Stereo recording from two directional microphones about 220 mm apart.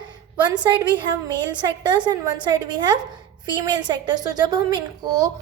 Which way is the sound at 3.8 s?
20° right (ahead or behind).